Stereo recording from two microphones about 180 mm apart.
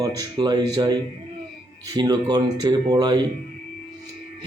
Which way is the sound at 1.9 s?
25° right (ahead or behind).